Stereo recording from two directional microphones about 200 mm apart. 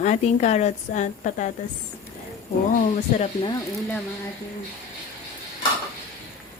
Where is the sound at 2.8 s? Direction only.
35° left (ahead or behind).